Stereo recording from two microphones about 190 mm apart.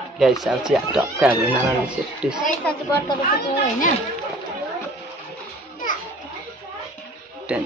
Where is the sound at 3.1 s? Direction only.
45° left (ahead or behind).